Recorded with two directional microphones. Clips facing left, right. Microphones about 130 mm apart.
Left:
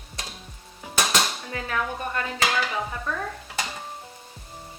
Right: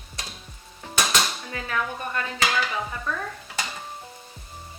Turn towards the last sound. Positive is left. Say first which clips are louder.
# left 1 dB
turn(degrees=35)  # may be behind; listen again after turning